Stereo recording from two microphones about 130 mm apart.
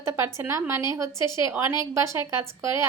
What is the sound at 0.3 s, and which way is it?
A woman's voice, 20° right (ahead or behind).